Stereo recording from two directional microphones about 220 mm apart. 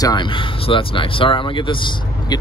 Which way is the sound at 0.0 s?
20° left (ahead or behind).